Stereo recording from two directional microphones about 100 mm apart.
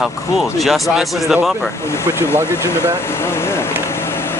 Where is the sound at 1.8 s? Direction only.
25° left (ahead or behind).